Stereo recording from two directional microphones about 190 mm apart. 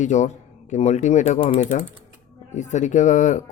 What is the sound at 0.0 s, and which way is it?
Speech, 40° left (ahead or behind).